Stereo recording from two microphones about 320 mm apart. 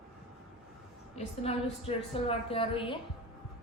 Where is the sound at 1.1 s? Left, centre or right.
Centre.